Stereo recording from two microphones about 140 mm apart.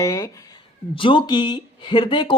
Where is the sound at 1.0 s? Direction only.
35° left (ahead or behind).